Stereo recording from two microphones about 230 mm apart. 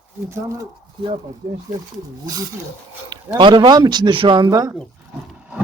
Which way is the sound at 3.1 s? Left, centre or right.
Centre.